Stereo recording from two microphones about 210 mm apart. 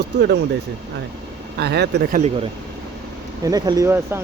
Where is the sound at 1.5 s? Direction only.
50° right (ahead or behind).